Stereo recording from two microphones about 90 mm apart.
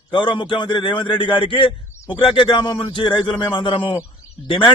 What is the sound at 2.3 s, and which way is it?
A man's voice, 60° left (ahead or behind).